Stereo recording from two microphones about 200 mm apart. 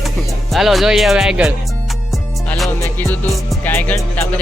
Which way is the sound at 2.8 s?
10° left (ahead or behind).